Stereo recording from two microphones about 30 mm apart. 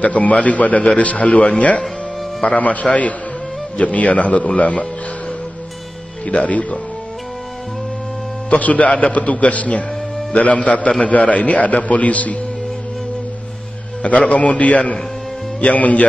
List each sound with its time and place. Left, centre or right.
0.0 s a man's voice: left
6.2 s speech: left
8.5 s a man's voice: left
14.0 s a man's voice: left